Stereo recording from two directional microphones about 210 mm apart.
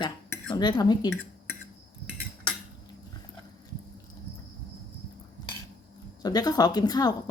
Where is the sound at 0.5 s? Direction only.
20° left (ahead or behind).